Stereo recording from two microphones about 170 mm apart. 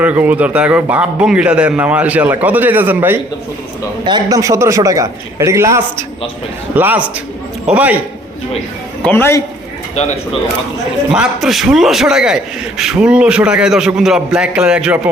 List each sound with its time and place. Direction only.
0.0 s a man's voice: 10° right (ahead or behind)
4.0 s a man's voice: 25° right (ahead or behind)
9.0 s a man's voice: 15° left (ahead or behind)
11.1 s a man's voice: 5° right (ahead or behind)